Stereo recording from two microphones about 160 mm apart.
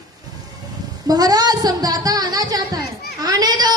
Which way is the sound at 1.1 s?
25° right (ahead or behind).